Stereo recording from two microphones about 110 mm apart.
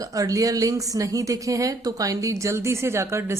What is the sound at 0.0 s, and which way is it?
A woman's voice, 30° right (ahead or behind).